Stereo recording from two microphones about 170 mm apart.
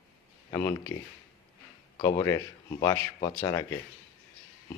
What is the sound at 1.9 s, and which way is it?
A man's voice, 20° left (ahead or behind).